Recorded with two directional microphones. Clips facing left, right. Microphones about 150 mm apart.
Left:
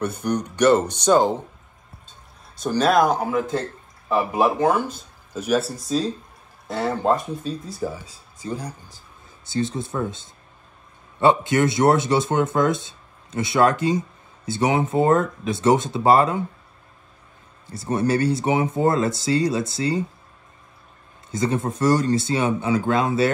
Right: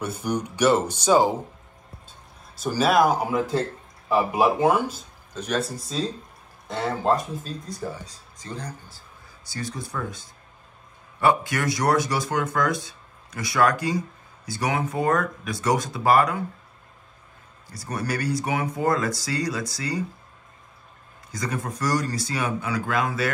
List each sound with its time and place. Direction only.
0.0 s speech: 5° right (ahead or behind)
2.5 s speech: 5° right (ahead or behind)
5.3 s speech: 5° left (ahead or behind); by 16.4 s 25° left (ahead or behind)
17.6 s speech: 25° left (ahead or behind)
21.3 s speech: 25° left (ahead or behind)